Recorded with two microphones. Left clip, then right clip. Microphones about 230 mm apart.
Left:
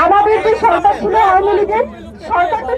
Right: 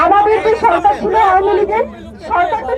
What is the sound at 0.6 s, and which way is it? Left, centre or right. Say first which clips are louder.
Speech: even; left.